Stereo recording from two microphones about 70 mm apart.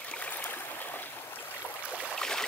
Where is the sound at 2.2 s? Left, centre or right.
Centre.